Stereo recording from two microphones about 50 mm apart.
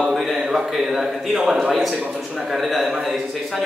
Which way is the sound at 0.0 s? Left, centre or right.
Centre.